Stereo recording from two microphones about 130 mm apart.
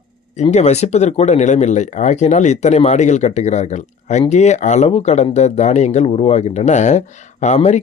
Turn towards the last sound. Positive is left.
turn(degrees=55)  # may be behind; listen again after turning